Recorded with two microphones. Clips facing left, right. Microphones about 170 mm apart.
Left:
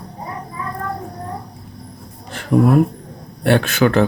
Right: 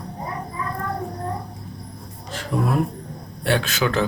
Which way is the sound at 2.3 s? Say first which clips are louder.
Left 9 dB; 55° left (ahead or behind).